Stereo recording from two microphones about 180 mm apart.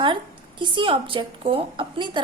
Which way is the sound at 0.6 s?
25° right (ahead or behind).